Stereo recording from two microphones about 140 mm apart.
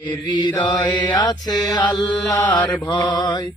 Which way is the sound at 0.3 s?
30° left (ahead or behind).